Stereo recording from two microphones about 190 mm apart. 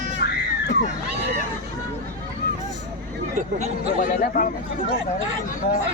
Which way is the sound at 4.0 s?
45° left (ahead or behind).